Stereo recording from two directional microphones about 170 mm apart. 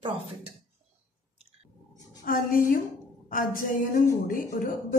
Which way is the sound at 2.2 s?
55° left (ahead or behind).